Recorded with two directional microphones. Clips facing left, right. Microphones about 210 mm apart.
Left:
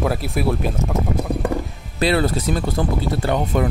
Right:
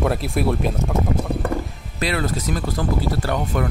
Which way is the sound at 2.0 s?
30° left (ahead or behind).